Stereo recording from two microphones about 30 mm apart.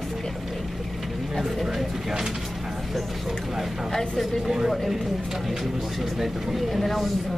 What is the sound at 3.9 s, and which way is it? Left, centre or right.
Speech, left.